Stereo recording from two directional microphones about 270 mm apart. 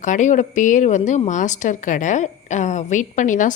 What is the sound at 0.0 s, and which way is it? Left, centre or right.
Speech, left.